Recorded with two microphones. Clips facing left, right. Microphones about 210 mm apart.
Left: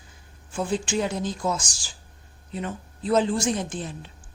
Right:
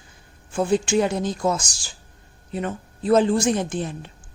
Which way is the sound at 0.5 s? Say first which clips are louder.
Right 6 dB; 60° right (ahead or behind).